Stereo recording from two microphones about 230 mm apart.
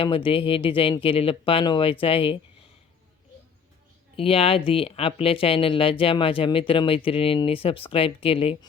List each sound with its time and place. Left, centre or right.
0.0 s speech: left
4.2 s speech: left